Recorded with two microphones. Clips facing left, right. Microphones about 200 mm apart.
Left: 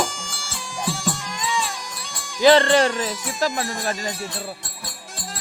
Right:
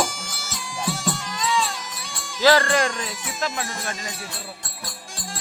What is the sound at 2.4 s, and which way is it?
Speech, 20° left (ahead or behind).